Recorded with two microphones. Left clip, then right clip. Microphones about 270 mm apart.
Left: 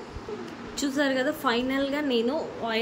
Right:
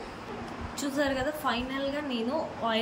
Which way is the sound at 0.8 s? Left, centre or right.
Centre.